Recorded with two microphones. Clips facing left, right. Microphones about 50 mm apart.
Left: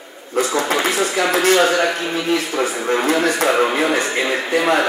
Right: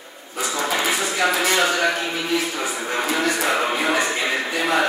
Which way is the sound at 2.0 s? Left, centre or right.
Left.